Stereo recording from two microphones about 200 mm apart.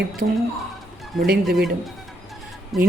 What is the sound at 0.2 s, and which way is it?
Speech, 40° right (ahead or behind).